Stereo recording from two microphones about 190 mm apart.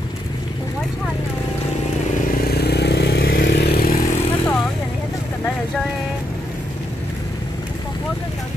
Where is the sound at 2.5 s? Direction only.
60° left (ahead or behind).